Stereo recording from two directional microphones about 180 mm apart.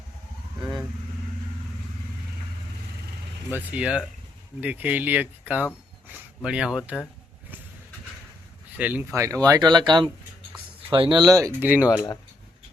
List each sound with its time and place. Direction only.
0.6 s vehicle: 5° right (ahead or behind)
3.5 s speech: 10° right (ahead or behind)
8.8 s speech: 10° right (ahead or behind)